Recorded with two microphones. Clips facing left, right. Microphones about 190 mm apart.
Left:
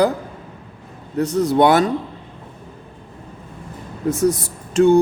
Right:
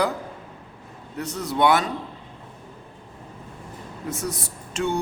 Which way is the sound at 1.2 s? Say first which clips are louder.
Left 8 dB; 35° left (ahead or behind).